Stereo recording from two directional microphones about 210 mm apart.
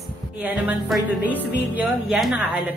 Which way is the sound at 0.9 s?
5° right (ahead or behind).